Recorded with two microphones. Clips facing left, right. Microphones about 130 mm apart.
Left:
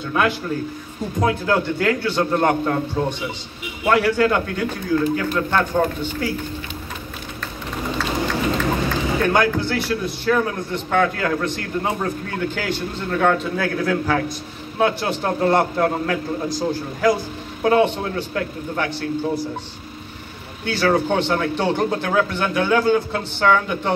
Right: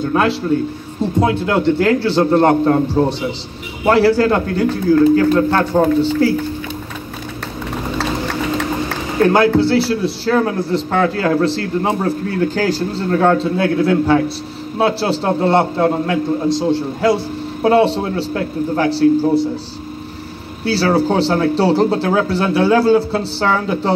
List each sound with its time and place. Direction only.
0.1 s a man's voice: 30° right (ahead or behind)
9.2 s a man's voice: 30° right (ahead or behind)
20.6 s a man's voice: 35° right (ahead or behind)